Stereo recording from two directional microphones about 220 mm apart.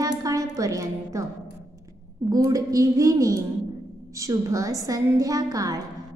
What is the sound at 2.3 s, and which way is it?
A woman's voice, 15° right (ahead or behind).